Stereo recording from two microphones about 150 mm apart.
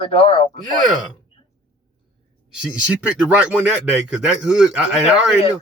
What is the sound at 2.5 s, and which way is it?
Speech, 5° right (ahead or behind).